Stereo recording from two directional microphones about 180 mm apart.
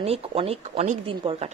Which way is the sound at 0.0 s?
35° right (ahead or behind).